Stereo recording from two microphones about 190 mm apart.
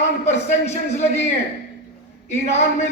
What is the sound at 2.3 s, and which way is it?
Speech, 35° left (ahead or behind).